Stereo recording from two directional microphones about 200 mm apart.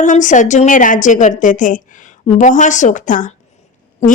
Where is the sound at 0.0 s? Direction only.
40° left (ahead or behind).